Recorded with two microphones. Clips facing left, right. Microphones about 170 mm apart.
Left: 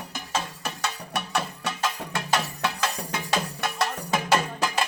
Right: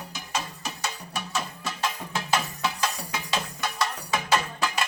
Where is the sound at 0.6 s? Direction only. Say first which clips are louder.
Left 2 dB; 60° left (ahead or behind).